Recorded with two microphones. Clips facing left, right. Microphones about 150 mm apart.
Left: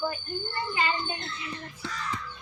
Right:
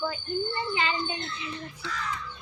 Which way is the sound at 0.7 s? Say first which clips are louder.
Even; 20° right (ahead or behind).